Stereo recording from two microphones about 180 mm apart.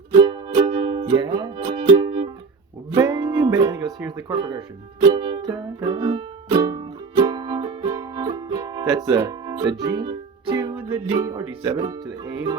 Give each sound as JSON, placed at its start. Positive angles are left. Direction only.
{"t": 0.1, "sound": "music", "side_deg": -30}
{"t": 4.3, "sound": "speech", "side_deg": -25}
{"t": 5.0, "sound": "music", "side_deg": -20}
{"t": 11.1, "sound": "speech", "side_deg": -20}